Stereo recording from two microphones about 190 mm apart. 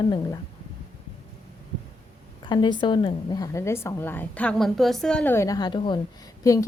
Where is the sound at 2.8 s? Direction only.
25° left (ahead or behind).